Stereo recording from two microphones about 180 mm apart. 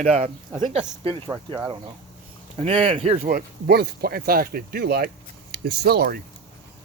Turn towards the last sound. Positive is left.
turn(degrees=-60)  # may be behind; listen again after turning